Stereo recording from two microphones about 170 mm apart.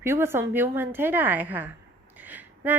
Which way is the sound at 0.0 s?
15° right (ahead or behind).